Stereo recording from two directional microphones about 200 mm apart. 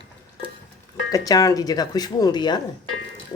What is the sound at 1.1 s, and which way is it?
Speech, 15° left (ahead or behind).